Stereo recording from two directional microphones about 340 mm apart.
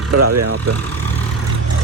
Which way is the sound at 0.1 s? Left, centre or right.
Right.